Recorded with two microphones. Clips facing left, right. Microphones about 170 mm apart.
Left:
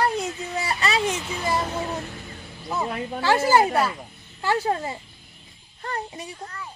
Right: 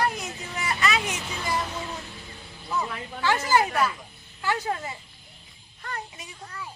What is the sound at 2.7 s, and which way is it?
Speech, 30° left (ahead or behind).